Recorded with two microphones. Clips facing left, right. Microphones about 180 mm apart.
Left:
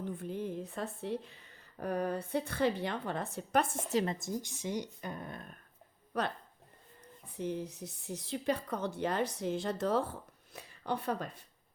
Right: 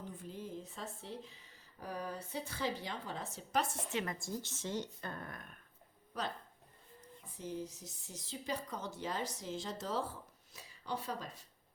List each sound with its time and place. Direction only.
0.0 s speech: 60° left (ahead or behind)
3.9 s a woman's voice: 25° left (ahead or behind)
6.1 s speech: 60° left (ahead or behind)